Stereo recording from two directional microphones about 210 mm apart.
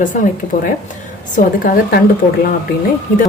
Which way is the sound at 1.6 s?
45° left (ahead or behind).